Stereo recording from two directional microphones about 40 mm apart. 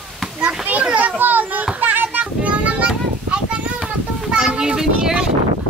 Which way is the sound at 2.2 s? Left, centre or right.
Right.